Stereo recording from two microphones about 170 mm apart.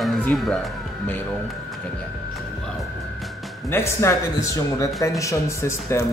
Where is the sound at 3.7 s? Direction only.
15° left (ahead or behind).